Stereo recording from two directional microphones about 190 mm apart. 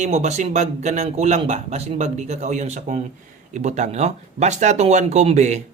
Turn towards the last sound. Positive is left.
turn(degrees=-40)  # may be behind; listen again after turning